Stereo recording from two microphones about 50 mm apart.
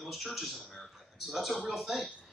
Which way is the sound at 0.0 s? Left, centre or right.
Centre.